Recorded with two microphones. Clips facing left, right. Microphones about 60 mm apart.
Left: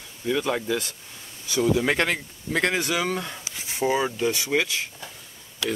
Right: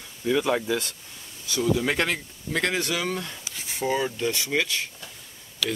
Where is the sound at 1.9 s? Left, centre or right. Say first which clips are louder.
Left 2 dB; centre.